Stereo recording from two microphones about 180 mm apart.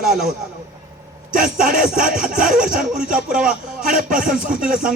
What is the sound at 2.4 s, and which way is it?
Speech, 50° right (ahead or behind).